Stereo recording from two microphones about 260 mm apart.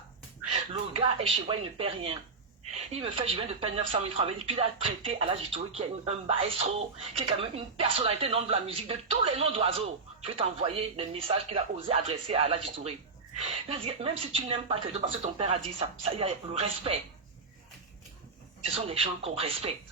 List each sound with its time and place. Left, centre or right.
0.7 s speech: centre
18.7 s speech: right